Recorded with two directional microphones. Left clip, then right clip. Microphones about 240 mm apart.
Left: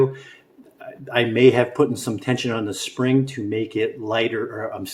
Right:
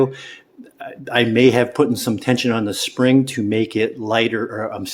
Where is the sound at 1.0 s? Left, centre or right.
Right.